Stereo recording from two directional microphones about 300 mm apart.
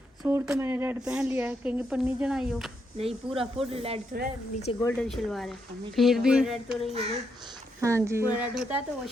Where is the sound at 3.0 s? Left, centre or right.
Centre.